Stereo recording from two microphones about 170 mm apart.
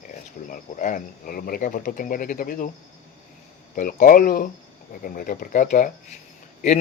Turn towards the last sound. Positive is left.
turn(degrees=40)  # may be behind; listen again after turning